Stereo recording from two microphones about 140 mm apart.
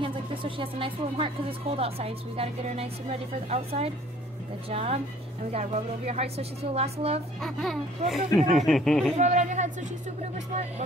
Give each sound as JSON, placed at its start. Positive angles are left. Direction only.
{"t": 0.0, "sound": "speech", "side_deg": -40}
{"t": 7.3, "sound": "speech", "side_deg": 5}
{"t": 9.2, "sound": "speech", "side_deg": -60}